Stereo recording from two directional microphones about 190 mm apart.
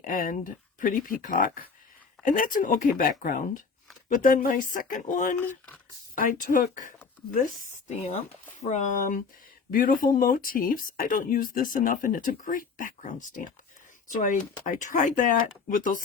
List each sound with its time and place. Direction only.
0.0 s speech: 45° left (ahead or behind)